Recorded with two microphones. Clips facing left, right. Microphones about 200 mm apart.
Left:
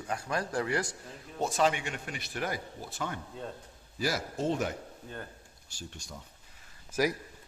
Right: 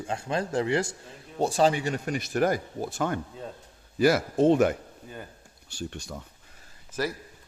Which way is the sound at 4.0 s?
60° right (ahead or behind).